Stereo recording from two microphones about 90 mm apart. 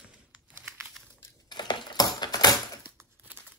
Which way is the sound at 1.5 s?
55° left (ahead or behind).